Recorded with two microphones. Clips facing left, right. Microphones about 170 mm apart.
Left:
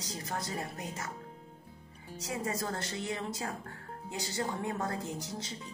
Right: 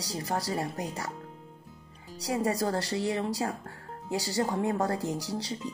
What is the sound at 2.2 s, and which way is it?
Speech, 35° right (ahead or behind).